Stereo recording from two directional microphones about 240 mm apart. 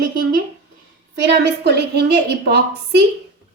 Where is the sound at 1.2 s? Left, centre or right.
Right.